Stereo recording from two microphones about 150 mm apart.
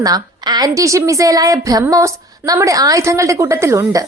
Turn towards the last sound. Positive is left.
turn(degrees=-20)  # may be behind; listen again after turning